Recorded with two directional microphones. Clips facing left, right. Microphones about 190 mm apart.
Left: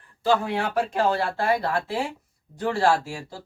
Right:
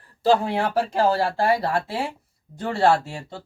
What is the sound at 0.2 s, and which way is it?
Speech, 35° right (ahead or behind).